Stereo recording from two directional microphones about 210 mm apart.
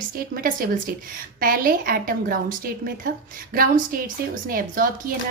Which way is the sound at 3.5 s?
40° right (ahead or behind).